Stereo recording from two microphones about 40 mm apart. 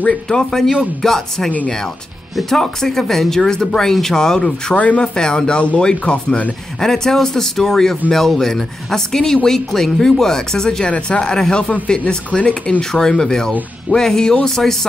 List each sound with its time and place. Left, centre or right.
0.3 s speech: centre
4.7 s speech: left
5.0 s speech: centre
5.6 s speech: left
6.8 s speech: centre
12.1 s speech: left
12.9 s speech: centre